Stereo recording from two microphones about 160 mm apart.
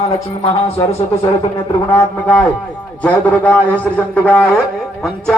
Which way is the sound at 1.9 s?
10° left (ahead or behind).